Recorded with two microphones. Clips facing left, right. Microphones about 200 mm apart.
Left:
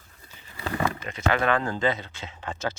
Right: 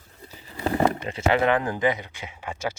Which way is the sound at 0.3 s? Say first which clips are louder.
Right 6 dB; 35° right (ahead or behind).